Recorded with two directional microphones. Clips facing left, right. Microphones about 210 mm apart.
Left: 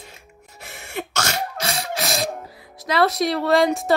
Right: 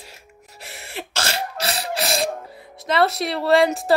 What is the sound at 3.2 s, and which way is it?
Speech, 30° right (ahead or behind).